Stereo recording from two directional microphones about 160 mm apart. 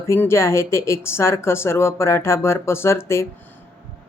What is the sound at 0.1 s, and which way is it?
Speech, 15° left (ahead or behind).